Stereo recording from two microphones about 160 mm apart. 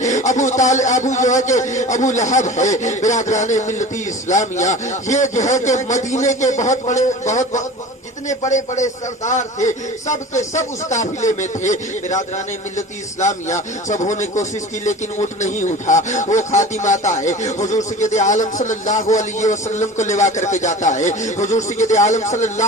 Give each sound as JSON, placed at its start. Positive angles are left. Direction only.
{"t": 0.0, "sound": "a man's voice", "side_deg": 50}